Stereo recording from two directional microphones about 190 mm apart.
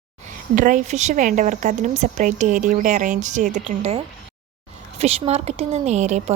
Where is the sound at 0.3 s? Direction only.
40° right (ahead or behind).